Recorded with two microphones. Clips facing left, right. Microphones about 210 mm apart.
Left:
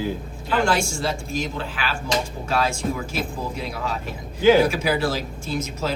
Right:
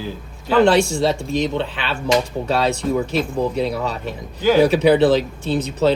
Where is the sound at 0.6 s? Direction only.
35° right (ahead or behind).